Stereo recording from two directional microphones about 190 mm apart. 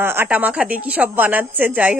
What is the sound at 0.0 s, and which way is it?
Speech, 10° right (ahead or behind).